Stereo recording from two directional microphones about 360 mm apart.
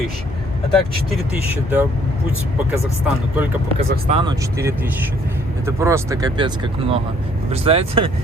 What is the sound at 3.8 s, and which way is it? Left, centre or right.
Speech, centre.